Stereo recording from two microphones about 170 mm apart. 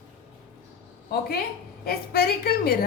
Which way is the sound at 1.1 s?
65° left (ahead or behind).